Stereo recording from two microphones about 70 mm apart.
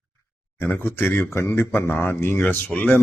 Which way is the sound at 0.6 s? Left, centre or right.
Left.